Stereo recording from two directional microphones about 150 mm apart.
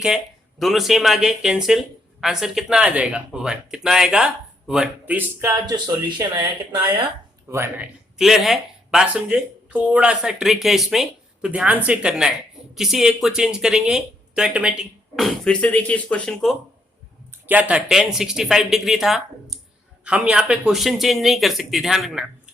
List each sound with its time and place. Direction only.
0.6 s speech: centre (ahead or behind)
5.6 s speech: 30° right (ahead or behind)
7.5 s speech: 15° right (ahead or behind)
8.2 s speech: centre (ahead or behind)
17.5 s speech: 10° right (ahead or behind)